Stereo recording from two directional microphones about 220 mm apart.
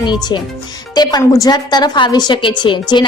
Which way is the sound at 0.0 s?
20° left (ahead or behind).